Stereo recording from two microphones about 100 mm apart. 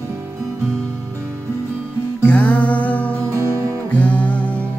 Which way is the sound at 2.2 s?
15° left (ahead or behind).